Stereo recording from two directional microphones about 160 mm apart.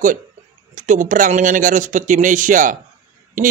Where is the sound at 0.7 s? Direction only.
50° right (ahead or behind).